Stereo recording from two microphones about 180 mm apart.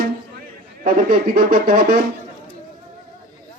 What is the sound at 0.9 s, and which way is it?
Speech, 55° right (ahead or behind).